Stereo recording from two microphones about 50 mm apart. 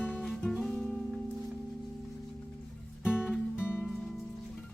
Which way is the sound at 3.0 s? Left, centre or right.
Left.